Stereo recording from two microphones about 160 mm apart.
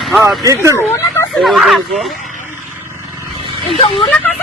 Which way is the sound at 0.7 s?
15° left (ahead or behind).